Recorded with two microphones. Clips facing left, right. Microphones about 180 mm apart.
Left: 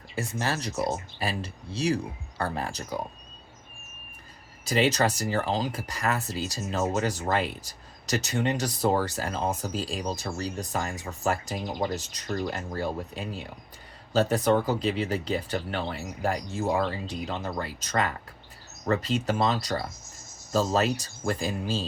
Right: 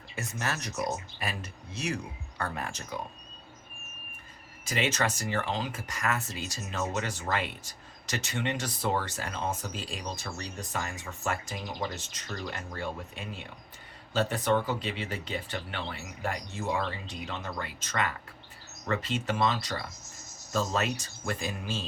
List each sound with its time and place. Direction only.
0.2 s speech: 30° left (ahead or behind)
4.6 s speech: 35° left (ahead or behind)